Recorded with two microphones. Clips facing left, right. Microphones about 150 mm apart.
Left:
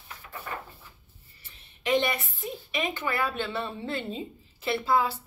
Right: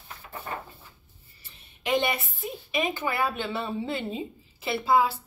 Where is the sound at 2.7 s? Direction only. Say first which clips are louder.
Right 2 dB; 10° right (ahead or behind).